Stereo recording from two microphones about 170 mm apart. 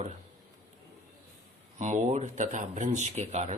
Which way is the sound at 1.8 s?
45° right (ahead or behind).